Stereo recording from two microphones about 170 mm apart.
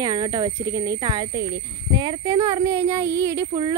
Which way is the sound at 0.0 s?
25° right (ahead or behind).